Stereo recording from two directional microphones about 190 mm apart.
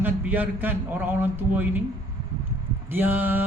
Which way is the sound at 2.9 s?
10° right (ahead or behind).